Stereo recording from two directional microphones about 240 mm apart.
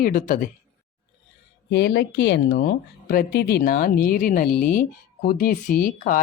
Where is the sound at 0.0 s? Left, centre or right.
Left.